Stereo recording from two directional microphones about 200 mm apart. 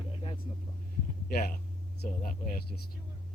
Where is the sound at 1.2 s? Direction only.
50° left (ahead or behind).